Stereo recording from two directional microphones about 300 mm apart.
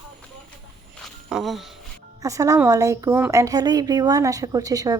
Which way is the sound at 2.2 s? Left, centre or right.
Centre.